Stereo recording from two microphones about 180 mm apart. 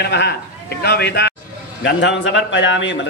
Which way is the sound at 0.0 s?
70° left (ahead or behind).